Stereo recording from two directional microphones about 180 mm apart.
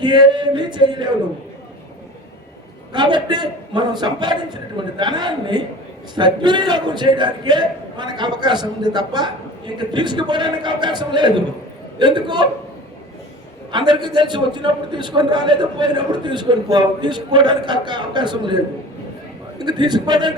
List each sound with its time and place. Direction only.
0.0 s a man's voice: 25° right (ahead or behind)
2.9 s a man's voice: 25° right (ahead or behind)
13.7 s a man's voice: 25° right (ahead or behind)